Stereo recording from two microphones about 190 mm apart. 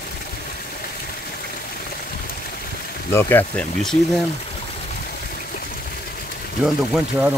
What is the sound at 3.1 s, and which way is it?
Speech, 10° left (ahead or behind).